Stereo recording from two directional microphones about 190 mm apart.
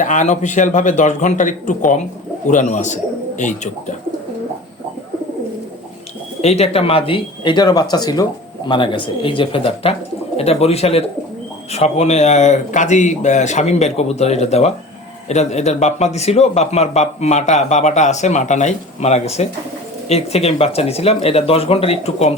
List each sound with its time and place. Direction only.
0.0 s a man's voice: 40° left (ahead or behind)
6.4 s a man's voice: 35° left (ahead or behind)